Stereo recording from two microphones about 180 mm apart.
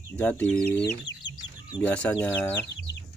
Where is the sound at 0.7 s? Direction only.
70° left (ahead or behind).